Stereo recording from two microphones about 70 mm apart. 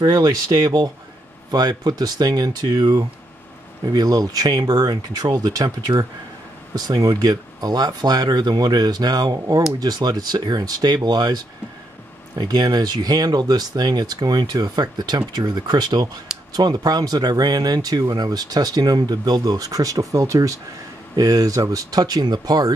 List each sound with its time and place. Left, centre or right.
0.0 s speech: right
3.8 s speech: right
16.5 s speech: right